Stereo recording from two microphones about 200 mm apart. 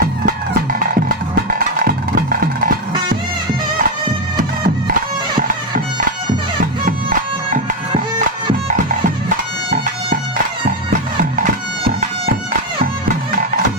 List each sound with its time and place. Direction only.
0.7 s music: 45° right (ahead or behind)
6.8 s music: 40° right (ahead or behind)